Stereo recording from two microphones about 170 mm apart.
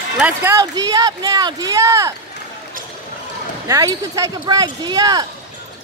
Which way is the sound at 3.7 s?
20° right (ahead or behind).